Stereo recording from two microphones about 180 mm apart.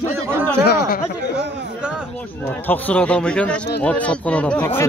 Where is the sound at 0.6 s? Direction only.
60° left (ahead or behind).